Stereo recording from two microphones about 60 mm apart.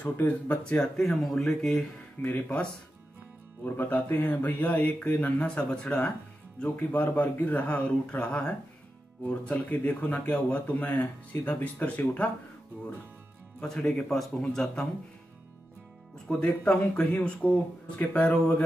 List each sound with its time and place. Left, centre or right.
0.2 s a man's voice: left
0.7 s speech: centre
2.2 s a man's voice: left
6.6 s a man's voice: left
13.6 s speech: centre
16.3 s a man's voice: centre